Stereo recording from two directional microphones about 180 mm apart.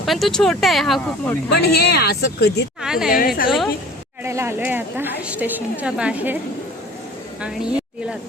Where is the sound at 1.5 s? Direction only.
60° left (ahead or behind).